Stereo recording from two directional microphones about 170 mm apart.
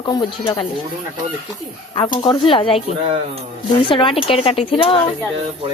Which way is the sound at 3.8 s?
30° left (ahead or behind).